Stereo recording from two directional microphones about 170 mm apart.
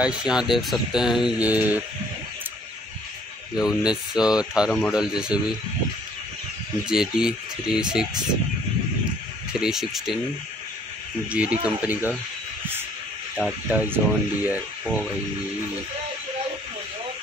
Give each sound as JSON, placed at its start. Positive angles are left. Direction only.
{"t": 0.0, "sound": "speech", "side_deg": -5}
{"t": 3.5, "sound": "speech", "side_deg": -5}
{"t": 6.9, "sound": "speech", "side_deg": -5}
{"t": 9.6, "sound": "speech", "side_deg": 0}
{"t": 11.2, "sound": "speech", "side_deg": -5}
{"t": 13.4, "sound": "speech", "side_deg": -5}